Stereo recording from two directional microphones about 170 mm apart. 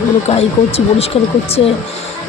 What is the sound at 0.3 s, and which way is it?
Speech, 35° left (ahead or behind).